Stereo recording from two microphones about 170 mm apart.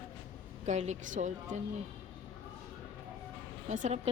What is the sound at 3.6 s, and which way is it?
Speech, 45° right (ahead or behind).